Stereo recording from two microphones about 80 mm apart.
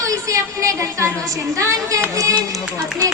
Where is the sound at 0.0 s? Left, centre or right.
Right.